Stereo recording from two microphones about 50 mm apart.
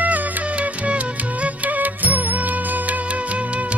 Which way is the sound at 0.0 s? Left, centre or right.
Right.